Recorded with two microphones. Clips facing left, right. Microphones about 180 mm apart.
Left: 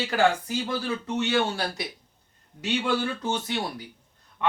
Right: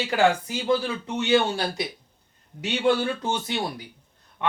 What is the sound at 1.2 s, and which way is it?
Speech, 20° right (ahead or behind).